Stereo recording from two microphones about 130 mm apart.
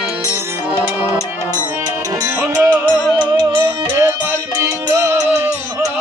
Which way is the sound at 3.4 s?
35° right (ahead or behind).